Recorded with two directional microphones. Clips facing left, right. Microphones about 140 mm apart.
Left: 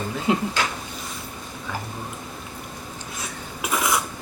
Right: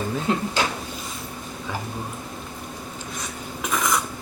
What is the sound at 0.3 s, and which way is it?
Speech, 10° left (ahead or behind).